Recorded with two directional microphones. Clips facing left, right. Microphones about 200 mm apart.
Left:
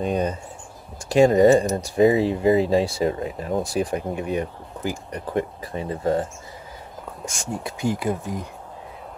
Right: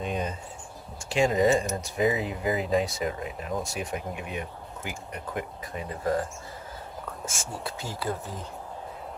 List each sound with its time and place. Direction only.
0.0 s speech: 40° left (ahead or behind)
7.6 s speech: 15° left (ahead or behind)